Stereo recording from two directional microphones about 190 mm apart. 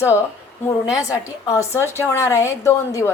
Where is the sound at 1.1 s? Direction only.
15° left (ahead or behind).